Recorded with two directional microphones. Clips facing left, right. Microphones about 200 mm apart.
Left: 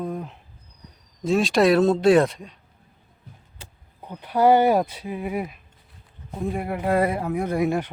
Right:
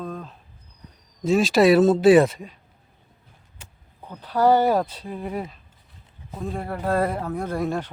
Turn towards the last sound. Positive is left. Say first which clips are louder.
# left 3 dB
turn(degrees=15)  # may be behind; listen again after turning